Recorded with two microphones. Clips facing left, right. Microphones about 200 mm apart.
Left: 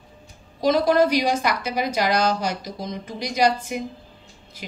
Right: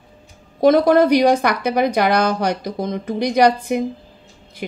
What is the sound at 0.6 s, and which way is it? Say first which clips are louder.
A woman's voice: right 5 dB; 55° right (ahead or behind).